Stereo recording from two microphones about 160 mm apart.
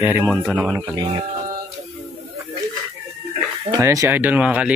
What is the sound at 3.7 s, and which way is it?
Speech, 20° right (ahead or behind).